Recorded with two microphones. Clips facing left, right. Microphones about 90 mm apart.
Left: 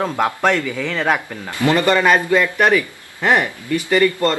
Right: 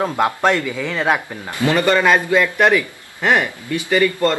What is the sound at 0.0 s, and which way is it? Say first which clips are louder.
Speech: right 1 dB; 15° right (ahead or behind).